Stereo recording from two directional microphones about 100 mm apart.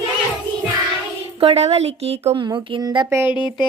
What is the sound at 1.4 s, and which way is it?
Speech, 80° right.